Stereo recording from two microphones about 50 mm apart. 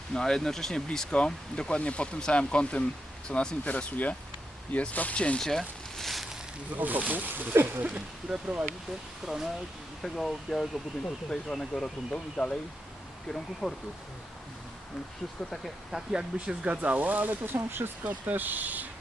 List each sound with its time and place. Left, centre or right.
0.1 s speech: centre
0.9 s speech: centre
5.4 s a sound: centre
6.7 s speech: right
7.9 s speech: right
9.2 s speech: centre
10.0 s speech: centre
13.2 s speech: centre
15.9 s speech: centre
16.6 s speech: right
18.0 s speech: right